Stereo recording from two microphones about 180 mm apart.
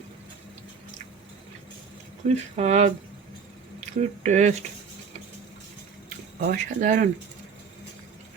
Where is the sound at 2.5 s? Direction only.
40° right (ahead or behind).